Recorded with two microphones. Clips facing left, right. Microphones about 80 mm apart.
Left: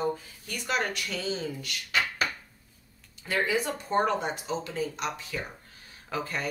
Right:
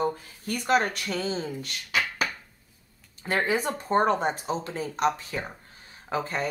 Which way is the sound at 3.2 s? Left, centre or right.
Right.